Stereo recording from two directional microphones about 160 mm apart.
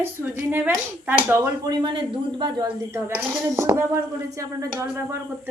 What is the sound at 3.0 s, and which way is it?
Speech, 10° right (ahead or behind).